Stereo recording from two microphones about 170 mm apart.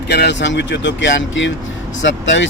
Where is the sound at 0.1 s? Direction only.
85° left.